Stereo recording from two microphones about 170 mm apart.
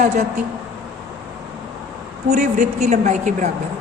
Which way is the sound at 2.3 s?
45° right (ahead or behind).